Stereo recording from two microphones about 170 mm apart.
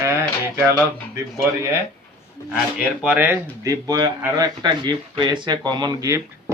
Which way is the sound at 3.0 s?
10° right (ahead or behind).